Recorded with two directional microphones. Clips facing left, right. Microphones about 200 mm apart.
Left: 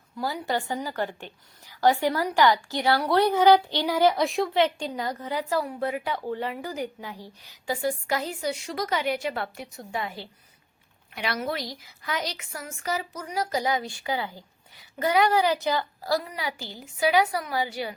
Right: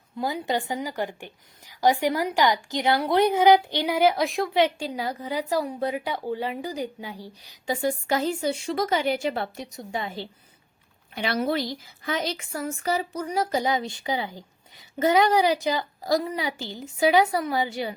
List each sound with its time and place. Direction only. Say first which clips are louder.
0.2 s a woman's voice: right 2 dB; 20° right (ahead or behind)
4.2 s a woman's voice: right 1 dB; centre (ahead or behind); by 17.9 s 20° right (ahead or behind)